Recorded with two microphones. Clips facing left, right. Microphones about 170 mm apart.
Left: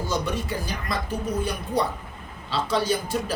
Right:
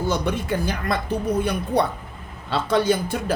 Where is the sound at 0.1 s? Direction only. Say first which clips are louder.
Right 3 dB; 55° right (ahead or behind).